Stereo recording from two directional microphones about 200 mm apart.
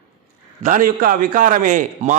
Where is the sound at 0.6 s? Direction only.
40° right (ahead or behind).